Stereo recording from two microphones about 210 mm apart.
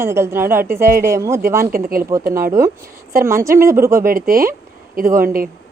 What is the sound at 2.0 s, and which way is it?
Speech, 15° right (ahead or behind).